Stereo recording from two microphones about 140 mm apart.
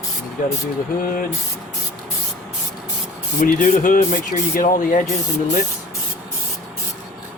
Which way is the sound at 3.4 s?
70° left (ahead or behind).